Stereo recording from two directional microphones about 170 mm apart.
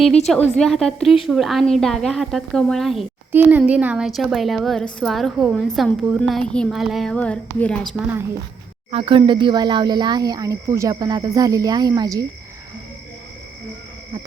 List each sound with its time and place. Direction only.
0.3 s a woman's voice: centre (ahead or behind)
8.9 s speech: 30° right (ahead or behind)